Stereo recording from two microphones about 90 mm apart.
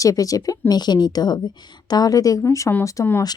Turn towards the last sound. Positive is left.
turn(degrees=40)  # may be behind; listen again after turning